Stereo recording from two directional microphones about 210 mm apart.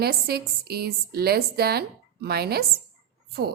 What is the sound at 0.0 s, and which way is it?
A woman's voice, 50° right (ahead or behind).